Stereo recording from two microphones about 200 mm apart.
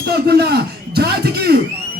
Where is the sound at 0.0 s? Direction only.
55° right (ahead or behind).